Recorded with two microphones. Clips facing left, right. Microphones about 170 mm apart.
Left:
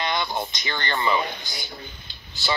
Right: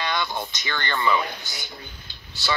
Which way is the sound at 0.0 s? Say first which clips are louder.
Left 1 dB; 20° left (ahead or behind).